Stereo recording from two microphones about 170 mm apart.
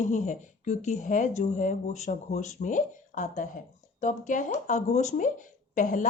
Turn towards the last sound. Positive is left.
turn(degrees=50)  # may be behind; listen again after turning